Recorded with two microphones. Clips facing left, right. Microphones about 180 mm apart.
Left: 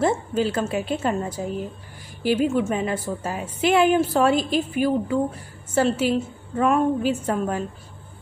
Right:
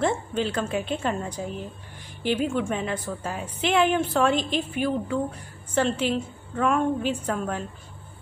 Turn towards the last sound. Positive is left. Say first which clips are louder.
# left 4 dB
turn(degrees=10)  # may be behind; listen again after turning